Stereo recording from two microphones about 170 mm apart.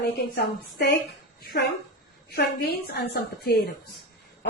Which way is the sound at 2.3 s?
70° left (ahead or behind).